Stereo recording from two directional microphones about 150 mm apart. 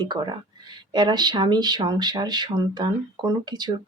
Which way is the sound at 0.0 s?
30° right (ahead or behind).